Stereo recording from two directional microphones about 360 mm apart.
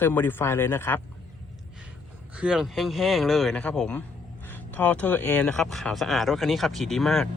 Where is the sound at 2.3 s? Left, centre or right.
Centre.